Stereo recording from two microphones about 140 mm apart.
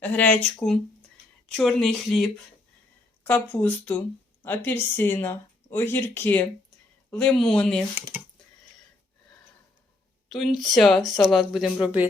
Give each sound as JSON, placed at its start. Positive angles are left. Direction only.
{"t": 0.0, "sound": "a woman's voice", "side_deg": 10}
{"t": 3.5, "sound": "a woman's voice", "side_deg": 10}
{"t": 10.2, "sound": "speech", "side_deg": 0}